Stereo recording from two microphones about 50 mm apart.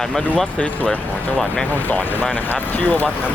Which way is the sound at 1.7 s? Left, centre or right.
Left.